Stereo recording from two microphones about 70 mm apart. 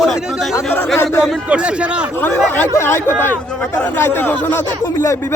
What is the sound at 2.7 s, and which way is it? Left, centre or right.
Speech, left.